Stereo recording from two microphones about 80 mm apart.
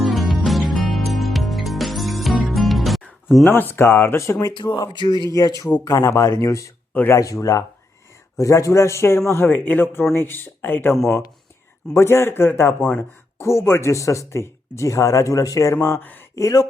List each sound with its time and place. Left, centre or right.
0.0 s music: centre
3.4 s speech: left
4.5 s speech: left
5.3 s speech: left
10.9 s speech: centre
11.9 s speech: left
16.0 s speech: left
16.3 s speech: left